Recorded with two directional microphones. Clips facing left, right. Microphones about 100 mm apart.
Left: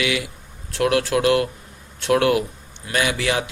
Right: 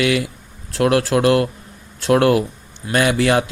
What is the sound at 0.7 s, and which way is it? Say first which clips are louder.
Speech: right 3 dB; 35° right (ahead or behind).